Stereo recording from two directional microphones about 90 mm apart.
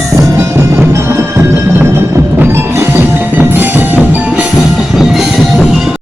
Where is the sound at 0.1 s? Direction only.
35° right (ahead or behind).